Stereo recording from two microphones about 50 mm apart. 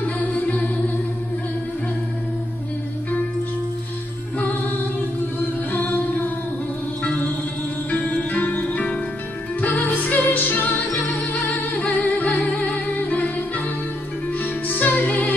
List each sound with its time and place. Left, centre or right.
0.0 s music: left
5.7 s music: left
8.0 s music: left
11.9 s music: left
14.4 s music: left